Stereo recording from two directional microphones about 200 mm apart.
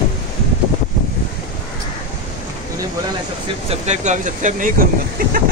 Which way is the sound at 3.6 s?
35° right (ahead or behind).